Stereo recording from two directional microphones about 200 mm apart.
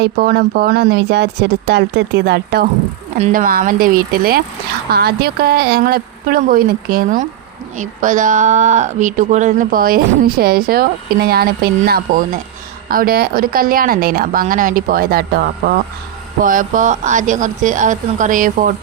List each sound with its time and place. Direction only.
0.0 s a woman's voice: 50° right (ahead or behind)